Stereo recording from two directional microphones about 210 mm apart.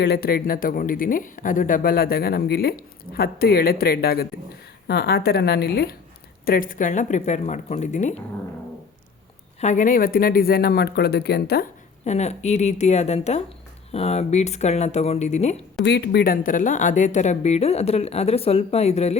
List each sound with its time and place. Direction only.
0.0 s speech: 50° left (ahead or behind); by 8.2 s 35° left (ahead or behind)
9.6 s speech: 35° left (ahead or behind)
12.0 s speech: 30° left (ahead or behind)
15.8 s speech: 55° left (ahead or behind); by 19.1 s 30° left (ahead or behind)